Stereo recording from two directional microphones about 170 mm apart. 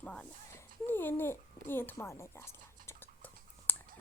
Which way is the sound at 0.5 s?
10° left (ahead or behind).